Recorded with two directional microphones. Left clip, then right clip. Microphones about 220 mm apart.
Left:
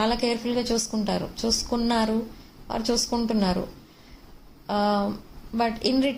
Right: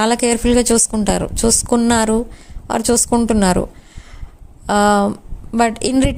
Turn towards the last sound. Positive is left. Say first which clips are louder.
# right 7 dB
turn(degrees=-45)  # may be behind; listen again after turning